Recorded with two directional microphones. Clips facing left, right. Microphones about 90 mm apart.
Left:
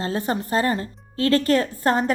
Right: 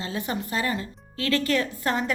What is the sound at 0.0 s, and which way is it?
Speech, 40° left (ahead or behind).